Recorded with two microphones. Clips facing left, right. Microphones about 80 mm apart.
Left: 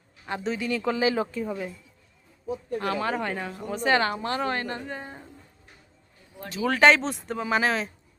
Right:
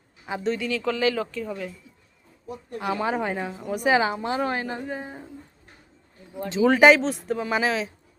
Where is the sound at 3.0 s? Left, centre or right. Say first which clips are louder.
Right 2 dB; centre.